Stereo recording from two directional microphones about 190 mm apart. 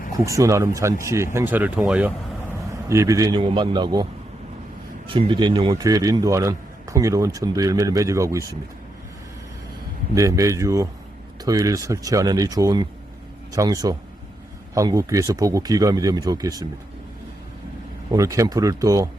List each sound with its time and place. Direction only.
0.3 s a man's voice: 15° right (ahead or behind)
5.0 s a man's voice: 25° right (ahead or behind)
10.2 s a man's voice: 15° right (ahead or behind)
18.1 s a man's voice: 15° right (ahead or behind)